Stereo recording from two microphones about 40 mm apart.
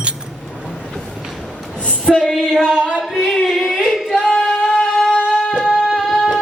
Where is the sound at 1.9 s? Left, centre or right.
Left.